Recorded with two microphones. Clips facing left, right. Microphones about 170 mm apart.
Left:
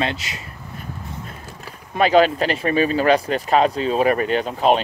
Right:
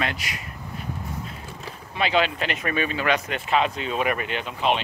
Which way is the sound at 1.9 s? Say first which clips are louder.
Left 8 dB; 45° left (ahead or behind).